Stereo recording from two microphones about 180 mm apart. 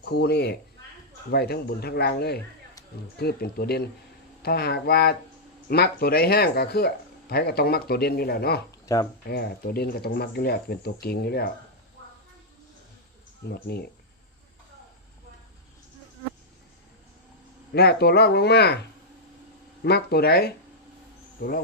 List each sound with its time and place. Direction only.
0.0 s speech: 65° left (ahead or behind)
8.9 s speech: 20° left (ahead or behind)
9.2 s speech: 60° left (ahead or behind)
13.5 s speech: 60° left (ahead or behind)
17.7 s speech: 65° left (ahead or behind)
19.8 s speech: 60° left (ahead or behind)